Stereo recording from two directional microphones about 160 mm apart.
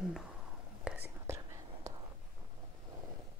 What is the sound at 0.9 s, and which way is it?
Whispering, 10° right (ahead or behind).